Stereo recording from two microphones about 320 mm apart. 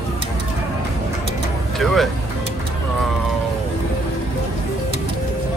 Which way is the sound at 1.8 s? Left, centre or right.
Centre.